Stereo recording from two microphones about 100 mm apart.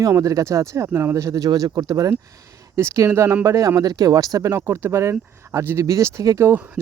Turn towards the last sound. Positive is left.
turn(degrees=-20)  # may be behind; listen again after turning